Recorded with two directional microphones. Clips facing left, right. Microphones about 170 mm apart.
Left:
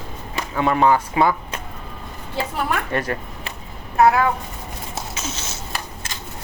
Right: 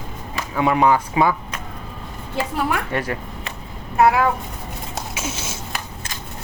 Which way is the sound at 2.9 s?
15° right (ahead or behind).